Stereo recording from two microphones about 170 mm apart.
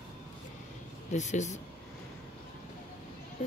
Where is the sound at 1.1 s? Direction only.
45° left (ahead or behind).